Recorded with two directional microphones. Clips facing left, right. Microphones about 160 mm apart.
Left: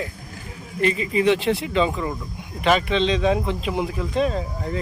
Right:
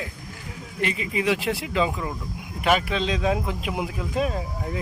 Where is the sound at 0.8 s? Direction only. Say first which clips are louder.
Left 5 dB; 35° left (ahead or behind).